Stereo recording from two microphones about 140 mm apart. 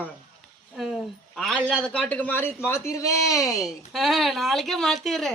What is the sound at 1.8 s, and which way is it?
A man's voice, 10° left (ahead or behind).